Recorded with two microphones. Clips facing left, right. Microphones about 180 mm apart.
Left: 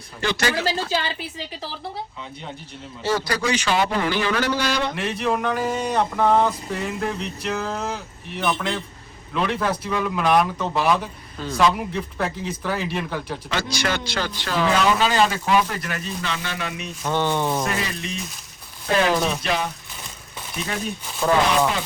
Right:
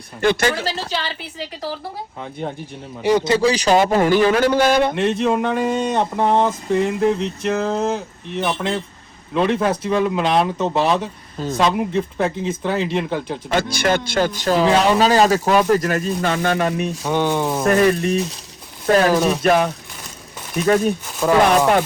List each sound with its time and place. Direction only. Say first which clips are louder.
0.2 s speech: right 6 dB; 55° right (ahead or behind)
3.0 s speech: right 8 dB; 20° right (ahead or behind); by 4.9 s 50° right (ahead or behind)
4.9 s speech: right 6 dB; 25° right (ahead or behind)
13.5 s speech: right 7 dB; 55° right (ahead or behind)
17.0 s speech: right 1 dB; 10° right (ahead or behind)
17.7 s speech: right 12 dB; 50° right (ahead or behind)
19.1 s speech: right 5 dB; 5° right (ahead or behind)
19.4 s speech: right 9 dB; 55° right (ahead or behind)